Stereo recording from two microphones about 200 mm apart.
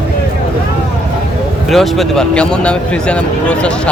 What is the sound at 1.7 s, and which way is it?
Speech, centre (ahead or behind).